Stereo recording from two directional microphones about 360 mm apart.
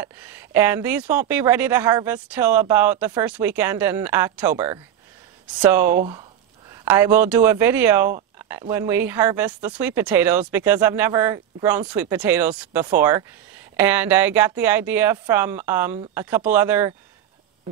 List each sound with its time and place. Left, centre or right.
0.0 s speech: centre